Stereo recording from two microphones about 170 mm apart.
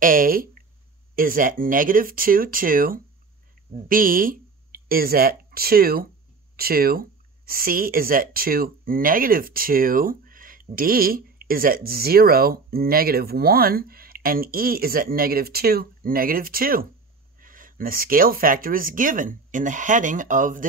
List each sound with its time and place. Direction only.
0.0 s speech: 55° right (ahead or behind)